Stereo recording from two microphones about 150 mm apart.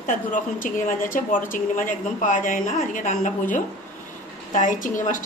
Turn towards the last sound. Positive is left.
turn(degrees=60)  # may be behind; listen again after turning